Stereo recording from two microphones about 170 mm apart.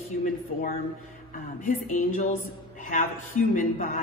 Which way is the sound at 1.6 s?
50° left (ahead or behind).